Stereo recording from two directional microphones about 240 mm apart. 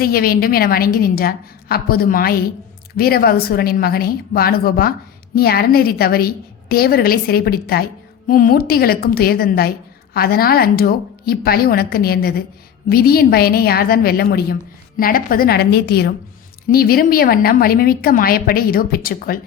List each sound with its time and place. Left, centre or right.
0.0 s a woman's voice: left